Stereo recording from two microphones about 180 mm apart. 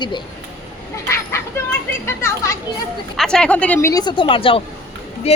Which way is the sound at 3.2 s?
5° left (ahead or behind).